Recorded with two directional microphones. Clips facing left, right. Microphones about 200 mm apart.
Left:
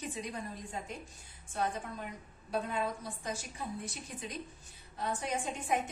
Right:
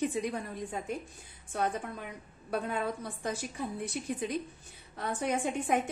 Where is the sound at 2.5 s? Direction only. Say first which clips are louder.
Right 2 dB; 60° right (ahead or behind).